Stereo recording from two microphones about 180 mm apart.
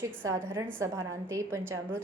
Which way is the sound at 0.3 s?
15° right (ahead or behind).